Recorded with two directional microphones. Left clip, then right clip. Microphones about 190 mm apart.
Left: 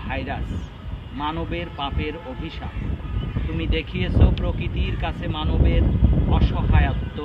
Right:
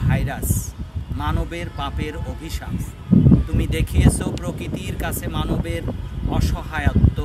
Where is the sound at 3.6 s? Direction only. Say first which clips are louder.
Right 3 dB; 15° right (ahead or behind).